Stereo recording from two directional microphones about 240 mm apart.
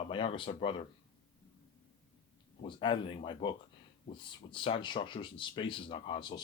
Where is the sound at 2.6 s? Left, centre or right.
Left.